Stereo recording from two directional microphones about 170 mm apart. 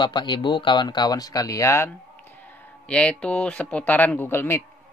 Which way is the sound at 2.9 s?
5° left (ahead or behind).